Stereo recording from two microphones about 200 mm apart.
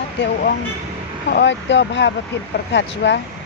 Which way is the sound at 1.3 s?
60° left (ahead or behind).